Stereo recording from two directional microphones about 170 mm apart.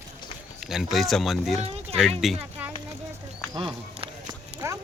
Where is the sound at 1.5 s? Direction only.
35° right (ahead or behind).